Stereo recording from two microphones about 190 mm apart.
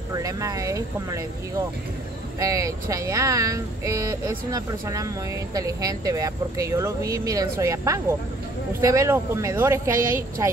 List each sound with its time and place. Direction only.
0.1 s speech: 20° right (ahead or behind)
2.4 s speech: 15° right (ahead or behind)